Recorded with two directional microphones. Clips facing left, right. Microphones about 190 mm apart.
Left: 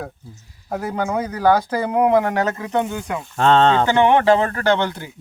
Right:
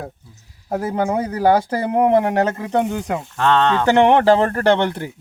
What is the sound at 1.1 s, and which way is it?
Speech, 30° right (ahead or behind).